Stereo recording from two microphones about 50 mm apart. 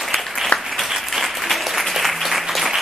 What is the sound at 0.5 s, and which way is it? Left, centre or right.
Applause, left.